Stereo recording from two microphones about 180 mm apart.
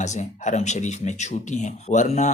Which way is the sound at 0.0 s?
40° left (ahead or behind).